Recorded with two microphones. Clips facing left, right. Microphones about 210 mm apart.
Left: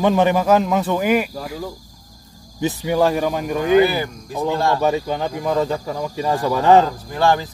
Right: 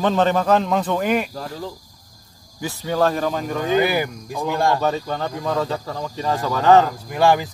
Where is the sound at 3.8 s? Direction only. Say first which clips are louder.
Left 1 dB; 15° right (ahead or behind).